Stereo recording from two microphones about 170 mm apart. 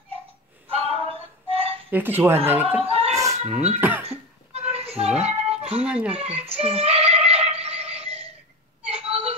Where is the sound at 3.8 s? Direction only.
10° right (ahead or behind).